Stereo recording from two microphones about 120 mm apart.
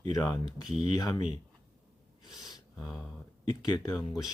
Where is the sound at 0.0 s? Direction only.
30° left (ahead or behind).